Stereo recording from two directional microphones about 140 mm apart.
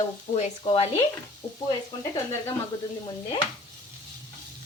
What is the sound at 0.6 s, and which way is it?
Speech, 40° left (ahead or behind).